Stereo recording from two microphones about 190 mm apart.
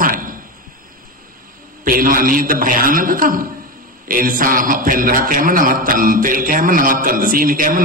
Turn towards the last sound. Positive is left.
turn(degrees=-50)  # may be behind; listen again after turning